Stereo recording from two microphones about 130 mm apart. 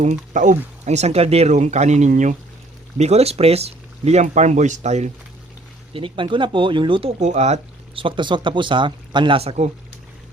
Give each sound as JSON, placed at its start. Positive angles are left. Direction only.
{"t": 0.0, "sound": "speech", "side_deg": -70}
{"t": 0.9, "sound": "speech", "side_deg": -55}
{"t": 3.0, "sound": "speech", "side_deg": -55}
{"t": 5.9, "sound": "speech", "side_deg": -40}
{"t": 7.2, "sound": "speech", "side_deg": -60}
{"t": 7.9, "sound": "speech", "side_deg": -40}